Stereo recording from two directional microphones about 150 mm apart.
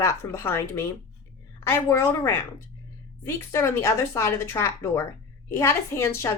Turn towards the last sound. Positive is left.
turn(degrees=15)  # may be behind; listen again after turning